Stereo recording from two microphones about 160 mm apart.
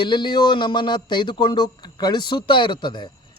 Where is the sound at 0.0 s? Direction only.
30° left (ahead or behind).